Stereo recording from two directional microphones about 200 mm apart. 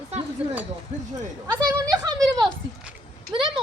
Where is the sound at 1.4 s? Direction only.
20° right (ahead or behind).